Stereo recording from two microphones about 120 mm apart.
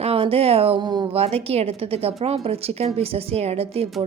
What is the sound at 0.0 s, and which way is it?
Speech, 55° right (ahead or behind).